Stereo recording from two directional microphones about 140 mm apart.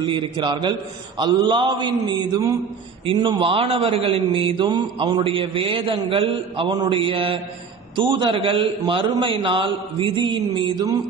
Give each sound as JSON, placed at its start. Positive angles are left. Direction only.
{"t": 0.0, "sound": "a man's voice", "side_deg": -35}